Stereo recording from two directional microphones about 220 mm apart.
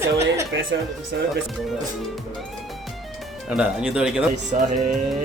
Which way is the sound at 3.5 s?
5° right (ahead or behind).